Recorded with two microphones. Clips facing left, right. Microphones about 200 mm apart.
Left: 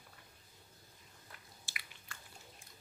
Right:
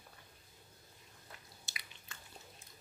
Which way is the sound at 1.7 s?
20° right (ahead or behind).